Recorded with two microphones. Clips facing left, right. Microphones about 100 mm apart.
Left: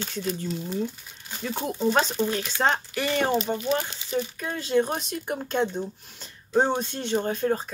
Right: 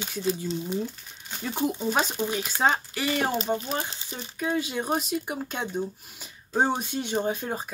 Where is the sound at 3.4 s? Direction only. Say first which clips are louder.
Left 2 dB; 35° right (ahead or behind).